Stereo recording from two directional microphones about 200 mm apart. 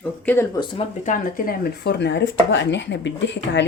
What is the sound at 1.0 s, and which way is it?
Speech, 40° left (ahead or behind).